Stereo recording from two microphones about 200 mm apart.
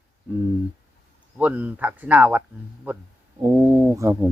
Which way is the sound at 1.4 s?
10° right (ahead or behind).